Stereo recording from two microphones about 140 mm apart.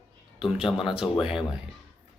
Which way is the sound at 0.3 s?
5° right (ahead or behind).